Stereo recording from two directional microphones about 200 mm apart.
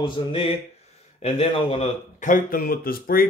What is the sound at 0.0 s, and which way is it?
Speech, 25° left (ahead or behind).